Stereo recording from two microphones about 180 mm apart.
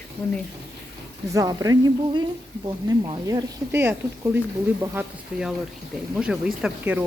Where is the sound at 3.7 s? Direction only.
15° right (ahead or behind).